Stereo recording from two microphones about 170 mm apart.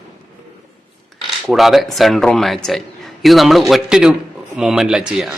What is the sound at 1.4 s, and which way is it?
A man's voice, centre (ahead or behind).